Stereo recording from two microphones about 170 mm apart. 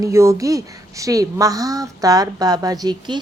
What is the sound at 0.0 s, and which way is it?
A woman's voice, 15° right (ahead or behind).